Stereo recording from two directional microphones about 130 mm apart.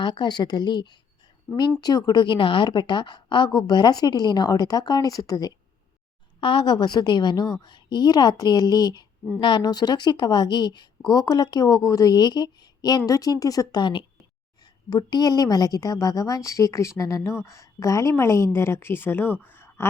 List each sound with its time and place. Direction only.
0.0 s a woman's voice: 35° left (ahead or behind); by 19.9 s 20° left (ahead or behind)